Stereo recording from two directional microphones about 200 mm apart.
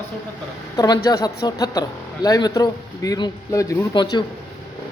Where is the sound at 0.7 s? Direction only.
20° left (ahead or behind).